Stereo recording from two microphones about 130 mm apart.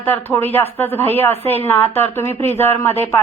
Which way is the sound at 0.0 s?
15° left (ahead or behind).